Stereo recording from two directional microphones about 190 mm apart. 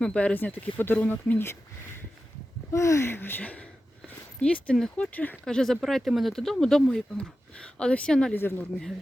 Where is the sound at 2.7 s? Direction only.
15° left (ahead or behind).